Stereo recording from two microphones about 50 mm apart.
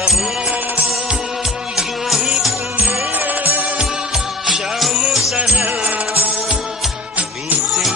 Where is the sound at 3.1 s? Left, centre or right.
Right.